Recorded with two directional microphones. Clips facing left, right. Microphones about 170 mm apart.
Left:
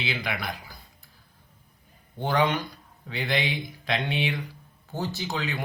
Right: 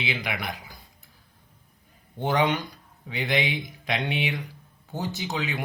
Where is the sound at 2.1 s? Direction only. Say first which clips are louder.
Right 1 dB; 20° right (ahead or behind).